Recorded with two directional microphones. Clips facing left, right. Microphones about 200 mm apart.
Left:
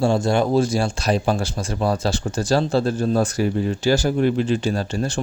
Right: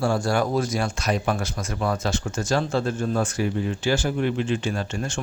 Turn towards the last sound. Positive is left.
turn(degrees=35)  # may be behind; listen again after turning